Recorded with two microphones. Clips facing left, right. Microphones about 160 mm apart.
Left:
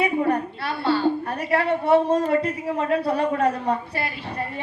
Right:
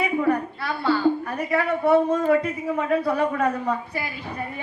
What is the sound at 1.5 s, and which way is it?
Speech, 30° left (ahead or behind).